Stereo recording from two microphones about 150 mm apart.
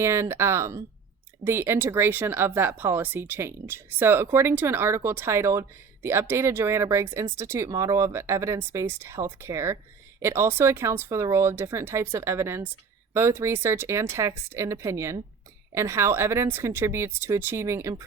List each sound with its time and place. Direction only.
0.0 s speech: 20° right (ahead or behind)